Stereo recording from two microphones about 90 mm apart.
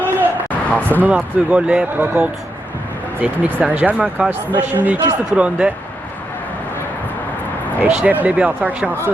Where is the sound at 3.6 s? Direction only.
20° right (ahead or behind).